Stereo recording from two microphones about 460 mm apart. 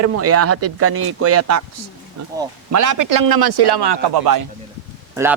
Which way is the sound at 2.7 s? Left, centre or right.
Right.